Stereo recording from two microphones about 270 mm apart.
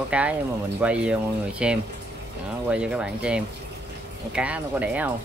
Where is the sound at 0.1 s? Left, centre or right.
Centre.